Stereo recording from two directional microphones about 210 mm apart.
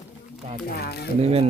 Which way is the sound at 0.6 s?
50° left (ahead or behind).